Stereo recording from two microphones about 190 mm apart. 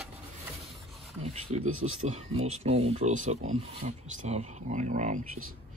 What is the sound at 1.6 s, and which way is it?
Speech, 90° right.